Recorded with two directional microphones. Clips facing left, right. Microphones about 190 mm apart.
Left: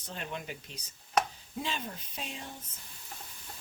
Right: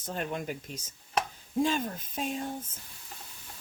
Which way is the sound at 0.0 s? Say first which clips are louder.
Right 6 dB; 45° right (ahead or behind).